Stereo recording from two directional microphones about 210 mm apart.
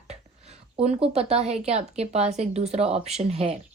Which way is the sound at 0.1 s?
30° right (ahead or behind).